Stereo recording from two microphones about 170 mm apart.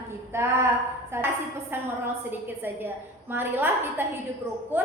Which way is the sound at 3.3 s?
10° right (ahead or behind).